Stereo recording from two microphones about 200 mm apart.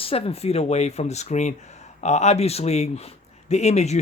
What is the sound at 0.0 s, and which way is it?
Speech, 30° left (ahead or behind).